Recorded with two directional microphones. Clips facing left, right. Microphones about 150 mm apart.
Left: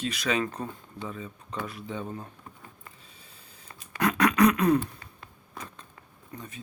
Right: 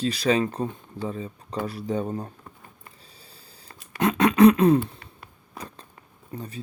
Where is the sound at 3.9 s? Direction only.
25° right (ahead or behind).